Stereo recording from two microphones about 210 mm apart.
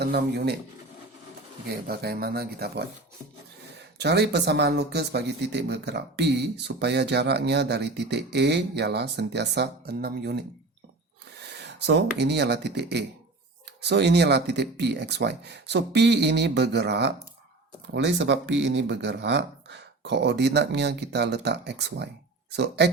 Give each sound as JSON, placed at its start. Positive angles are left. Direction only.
{"t": 0.0, "sound": "speech", "side_deg": -50}
{"t": 1.9, "sound": "speech", "side_deg": -45}
{"t": 3.9, "sound": "speech", "side_deg": -50}